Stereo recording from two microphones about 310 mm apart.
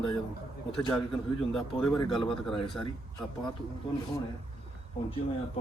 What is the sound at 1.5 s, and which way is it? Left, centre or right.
Speech, centre.